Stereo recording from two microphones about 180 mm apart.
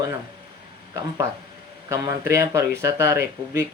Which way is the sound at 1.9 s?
15° right (ahead or behind).